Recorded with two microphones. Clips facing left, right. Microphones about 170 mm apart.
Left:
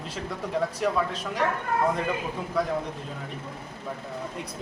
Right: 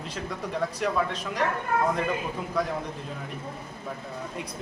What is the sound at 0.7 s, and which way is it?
Speech, 5° left (ahead or behind).